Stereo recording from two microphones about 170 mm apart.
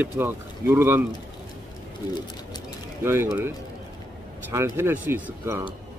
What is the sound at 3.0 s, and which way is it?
Speech, 15° right (ahead or behind).